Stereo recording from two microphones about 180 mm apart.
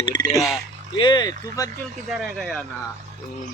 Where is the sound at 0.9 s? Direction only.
25° left (ahead or behind).